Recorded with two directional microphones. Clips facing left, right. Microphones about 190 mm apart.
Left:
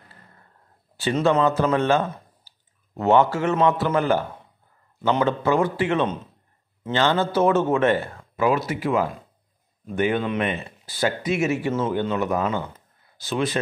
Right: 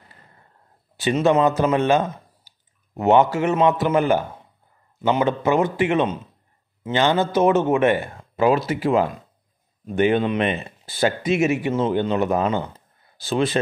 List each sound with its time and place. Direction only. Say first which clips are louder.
0.9 s a man's voice: right 2 dB; 20° right (ahead or behind)
8.4 s speech: right 3 dB; 30° right (ahead or behind)